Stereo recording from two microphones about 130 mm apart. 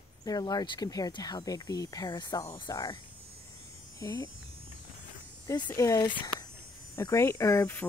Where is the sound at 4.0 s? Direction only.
25° left (ahead or behind).